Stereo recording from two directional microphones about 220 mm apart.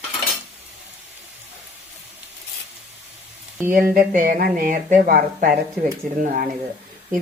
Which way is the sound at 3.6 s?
40° right (ahead or behind).